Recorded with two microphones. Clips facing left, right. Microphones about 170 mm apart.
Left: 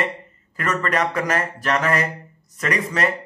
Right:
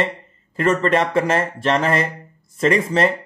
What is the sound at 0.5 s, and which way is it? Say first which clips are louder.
Speech: right 6 dB; 30° right (ahead or behind).